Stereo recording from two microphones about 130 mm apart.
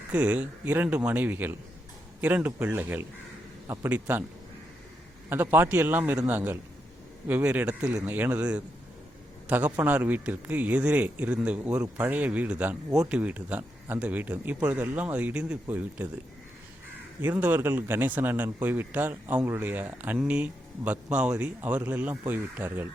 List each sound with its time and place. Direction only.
0.1 s a man's voice: 10° right (ahead or behind)
5.3 s a man's voice: 15° right (ahead or behind)
17.2 s a man's voice: 15° right (ahead or behind)